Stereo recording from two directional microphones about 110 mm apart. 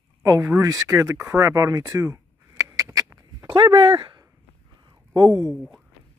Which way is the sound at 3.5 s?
50° right (ahead or behind).